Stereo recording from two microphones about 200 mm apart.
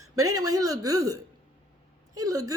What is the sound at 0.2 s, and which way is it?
Speech, 90° right.